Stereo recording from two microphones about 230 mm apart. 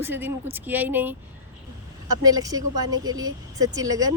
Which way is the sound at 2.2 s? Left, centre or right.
Centre.